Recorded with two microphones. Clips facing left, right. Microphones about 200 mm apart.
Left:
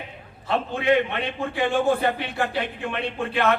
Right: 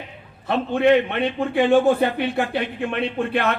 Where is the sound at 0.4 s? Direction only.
55° right (ahead or behind).